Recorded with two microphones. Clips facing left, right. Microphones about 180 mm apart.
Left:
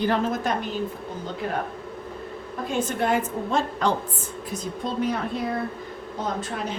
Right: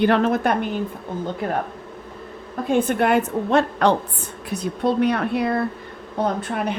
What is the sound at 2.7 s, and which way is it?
A woman's voice, 60° right (ahead or behind).